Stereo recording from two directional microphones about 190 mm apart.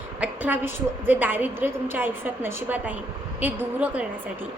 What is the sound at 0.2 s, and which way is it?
A woman's voice, 10° right (ahead or behind).